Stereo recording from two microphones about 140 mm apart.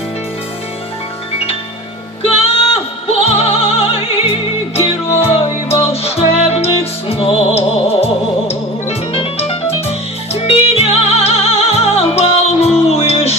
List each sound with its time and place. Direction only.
2.2 s music: 45° left (ahead or behind)